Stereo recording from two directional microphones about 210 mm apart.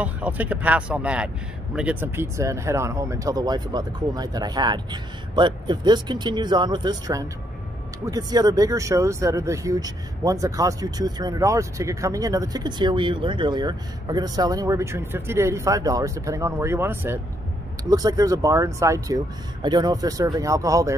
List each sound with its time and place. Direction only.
0.0 s speech: 5° right (ahead or behind)